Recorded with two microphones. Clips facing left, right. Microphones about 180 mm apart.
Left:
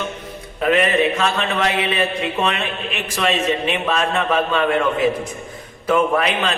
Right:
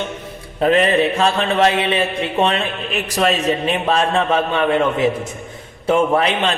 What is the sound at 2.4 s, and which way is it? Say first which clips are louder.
A man's voice: right 6 dB; 30° right (ahead or behind).